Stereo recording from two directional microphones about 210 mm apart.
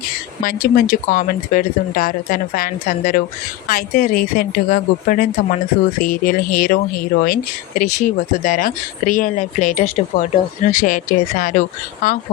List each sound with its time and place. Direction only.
0.4 s speech: 40° left (ahead or behind)